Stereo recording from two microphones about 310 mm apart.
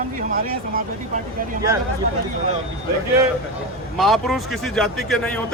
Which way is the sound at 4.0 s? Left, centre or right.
Centre.